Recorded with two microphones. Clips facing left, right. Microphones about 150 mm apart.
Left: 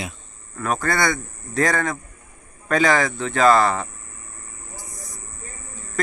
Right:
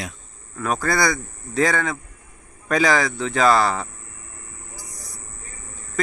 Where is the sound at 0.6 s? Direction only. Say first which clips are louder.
Right 1 dB; 10° right (ahead or behind).